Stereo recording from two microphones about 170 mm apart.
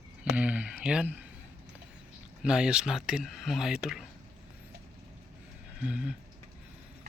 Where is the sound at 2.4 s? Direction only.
5° right (ahead or behind).